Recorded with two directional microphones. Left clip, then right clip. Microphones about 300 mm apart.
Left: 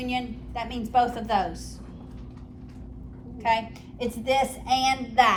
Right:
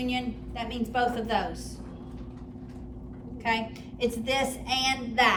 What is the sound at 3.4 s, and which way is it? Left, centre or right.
A woman's voice, centre.